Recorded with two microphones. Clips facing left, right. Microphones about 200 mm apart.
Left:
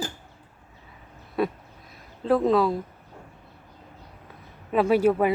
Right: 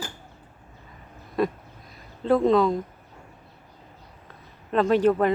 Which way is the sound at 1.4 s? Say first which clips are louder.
Right 1 dB; 5° left (ahead or behind).